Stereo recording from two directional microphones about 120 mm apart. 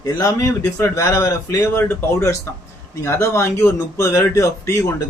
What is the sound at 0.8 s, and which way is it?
A man's voice, 25° left (ahead or behind).